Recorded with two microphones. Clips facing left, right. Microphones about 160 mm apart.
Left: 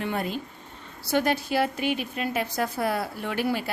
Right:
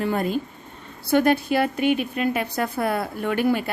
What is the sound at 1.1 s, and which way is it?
A woman's voice, 55° right (ahead or behind).